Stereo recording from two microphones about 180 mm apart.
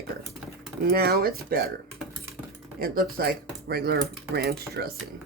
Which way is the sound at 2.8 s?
55° right (ahead or behind).